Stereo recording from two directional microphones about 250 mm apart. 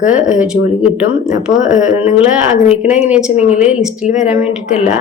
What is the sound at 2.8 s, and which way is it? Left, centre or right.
A woman's voice, centre.